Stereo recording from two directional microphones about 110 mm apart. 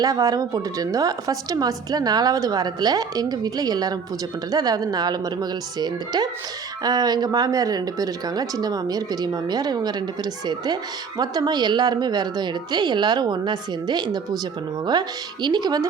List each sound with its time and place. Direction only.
0.0 s a woman's voice: 30° right (ahead or behind)